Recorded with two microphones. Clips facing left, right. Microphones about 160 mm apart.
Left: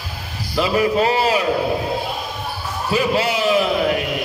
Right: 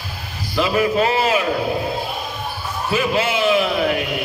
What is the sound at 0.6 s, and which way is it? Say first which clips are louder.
Speech: even; 35° left (ahead or behind).